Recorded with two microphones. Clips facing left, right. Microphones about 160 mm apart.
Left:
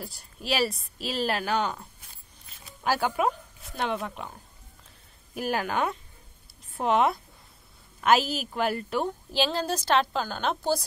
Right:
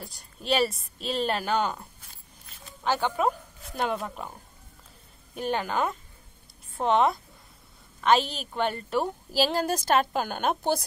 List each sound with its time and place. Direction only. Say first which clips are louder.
0.0 s a woman's voice: left 1 dB; centre (ahead or behind)
2.5 s zipper: even; 10° left (ahead or behind)
3.7 s a woman's voice: right 1 dB; centre (ahead or behind)
5.3 s a woman's voice: even; 5° left (ahead or behind)
9.8 s speech: left 2 dB; 50° right (ahead or behind)